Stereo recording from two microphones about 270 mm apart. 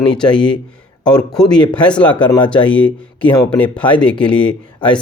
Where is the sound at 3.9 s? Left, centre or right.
Centre.